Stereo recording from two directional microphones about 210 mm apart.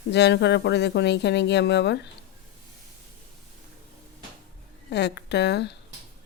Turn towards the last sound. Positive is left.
turn(degrees=55)  # may be behind; listen again after turning